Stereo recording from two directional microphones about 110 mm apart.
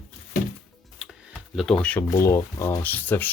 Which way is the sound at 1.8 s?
10° left (ahead or behind).